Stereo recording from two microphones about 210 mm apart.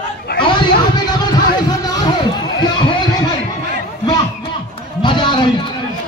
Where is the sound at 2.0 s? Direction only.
20° left (ahead or behind).